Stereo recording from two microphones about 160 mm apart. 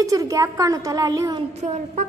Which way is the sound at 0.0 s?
20° right (ahead or behind).